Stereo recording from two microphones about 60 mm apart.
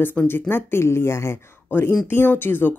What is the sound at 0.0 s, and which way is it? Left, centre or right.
Speech, left.